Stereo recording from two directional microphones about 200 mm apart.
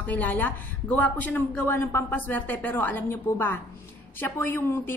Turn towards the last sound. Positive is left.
turn(degrees=10)  # may be behind; listen again after turning